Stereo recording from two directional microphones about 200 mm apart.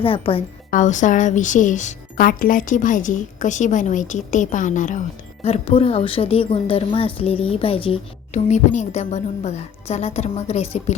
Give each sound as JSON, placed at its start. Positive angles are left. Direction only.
{"t": 0.0, "sound": "speech", "side_deg": 25}
{"t": 0.7, "sound": "speech", "side_deg": 40}